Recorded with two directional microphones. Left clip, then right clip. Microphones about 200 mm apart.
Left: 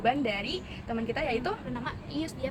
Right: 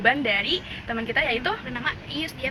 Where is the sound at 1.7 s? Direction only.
30° left (ahead or behind).